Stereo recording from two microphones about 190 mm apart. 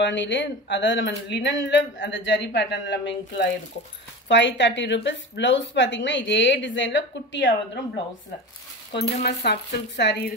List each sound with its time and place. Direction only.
0.0 s speech: 70° left (ahead or behind)
9.2 s speech: 60° left (ahead or behind)